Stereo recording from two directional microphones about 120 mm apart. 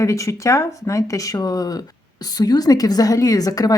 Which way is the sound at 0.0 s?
25° left (ahead or behind).